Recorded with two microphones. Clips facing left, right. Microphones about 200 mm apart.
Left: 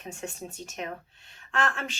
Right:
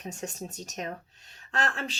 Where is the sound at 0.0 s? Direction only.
40° right (ahead or behind).